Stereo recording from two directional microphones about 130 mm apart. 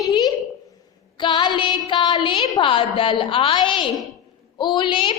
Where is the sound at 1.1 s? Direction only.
40° left (ahead or behind).